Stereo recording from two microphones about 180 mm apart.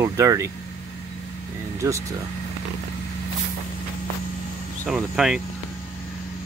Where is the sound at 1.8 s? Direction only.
20° right (ahead or behind).